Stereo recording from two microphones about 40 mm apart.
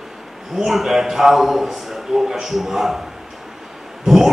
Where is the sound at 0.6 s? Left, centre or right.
Centre.